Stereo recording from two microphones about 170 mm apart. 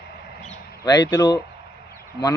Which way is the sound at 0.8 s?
25° left (ahead or behind).